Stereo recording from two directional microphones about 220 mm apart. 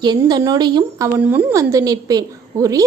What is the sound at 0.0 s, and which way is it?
A woman's voice, 20° right (ahead or behind).